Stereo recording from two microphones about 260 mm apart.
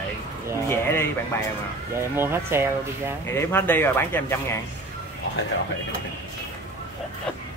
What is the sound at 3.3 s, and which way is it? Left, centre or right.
Speech, centre.